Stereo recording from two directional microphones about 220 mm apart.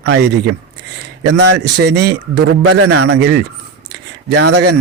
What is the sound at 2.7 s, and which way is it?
Speech, 80° right.